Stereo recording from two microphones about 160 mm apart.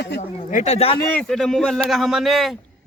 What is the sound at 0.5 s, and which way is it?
Speech, 45° left (ahead or behind).